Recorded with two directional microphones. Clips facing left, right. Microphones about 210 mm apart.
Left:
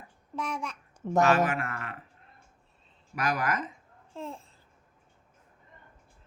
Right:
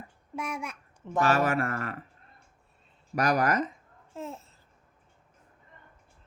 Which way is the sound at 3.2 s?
40° right (ahead or behind).